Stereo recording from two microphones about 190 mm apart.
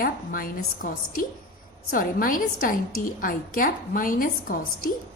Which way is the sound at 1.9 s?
45° left (ahead or behind).